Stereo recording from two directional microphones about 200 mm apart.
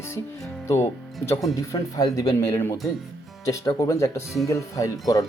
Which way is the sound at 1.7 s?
15° left (ahead or behind).